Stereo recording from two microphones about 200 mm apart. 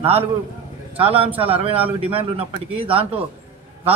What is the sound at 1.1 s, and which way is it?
A man's voice, 25° right (ahead or behind).